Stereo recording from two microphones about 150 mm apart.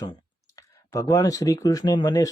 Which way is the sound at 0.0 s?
25° left (ahead or behind).